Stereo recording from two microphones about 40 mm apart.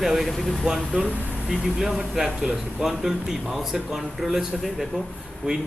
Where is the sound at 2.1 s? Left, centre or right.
Centre.